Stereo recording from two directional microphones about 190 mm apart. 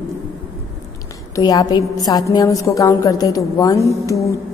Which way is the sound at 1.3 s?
20° left (ahead or behind).